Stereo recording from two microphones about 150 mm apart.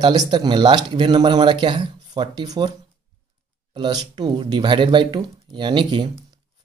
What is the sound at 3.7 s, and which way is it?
Speech, 30° right (ahead or behind).